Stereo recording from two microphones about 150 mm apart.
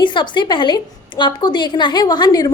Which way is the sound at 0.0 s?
30° left (ahead or behind).